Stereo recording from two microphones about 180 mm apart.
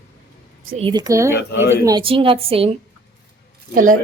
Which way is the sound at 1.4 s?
65° left (ahead or behind).